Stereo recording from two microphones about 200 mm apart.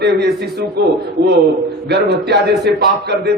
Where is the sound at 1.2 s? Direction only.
50° right (ahead or behind).